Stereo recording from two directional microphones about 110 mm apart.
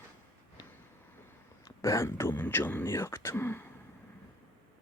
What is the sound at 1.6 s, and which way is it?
Speech, 30° left (ahead or behind).